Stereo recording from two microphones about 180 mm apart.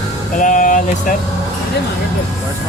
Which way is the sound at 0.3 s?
45° left (ahead or behind).